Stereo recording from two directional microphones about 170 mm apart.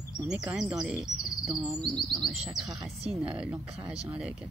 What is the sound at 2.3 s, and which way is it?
Speech, 5° right (ahead or behind).